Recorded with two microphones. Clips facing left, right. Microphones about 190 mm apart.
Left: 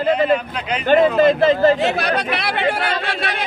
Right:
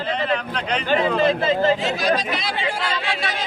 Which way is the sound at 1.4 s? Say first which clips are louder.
Left 5 dB; 50° left (ahead or behind).